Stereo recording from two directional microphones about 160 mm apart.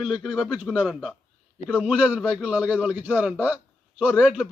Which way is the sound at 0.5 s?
10° right (ahead or behind).